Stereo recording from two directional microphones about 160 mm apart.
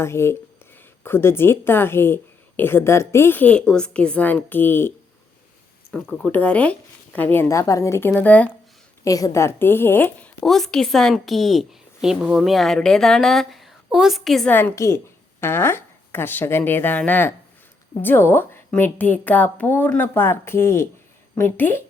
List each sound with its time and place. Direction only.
0.0 s speech: 15° left (ahead or behind)
9.0 s speech: 20° left (ahead or behind)